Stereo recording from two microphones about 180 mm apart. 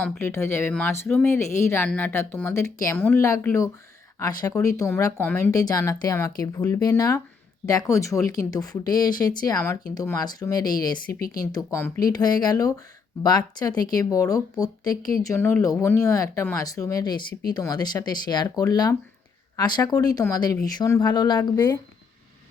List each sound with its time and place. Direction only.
0.0 s speech: 10° left (ahead or behind)